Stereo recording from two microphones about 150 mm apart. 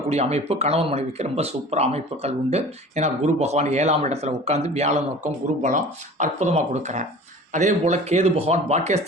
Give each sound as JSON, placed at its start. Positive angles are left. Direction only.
{"t": 0.1, "sound": "speech", "side_deg": -45}